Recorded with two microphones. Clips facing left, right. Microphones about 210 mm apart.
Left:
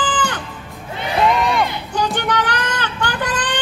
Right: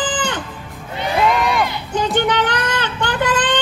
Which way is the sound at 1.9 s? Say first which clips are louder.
Right 3 dB; 20° right (ahead or behind).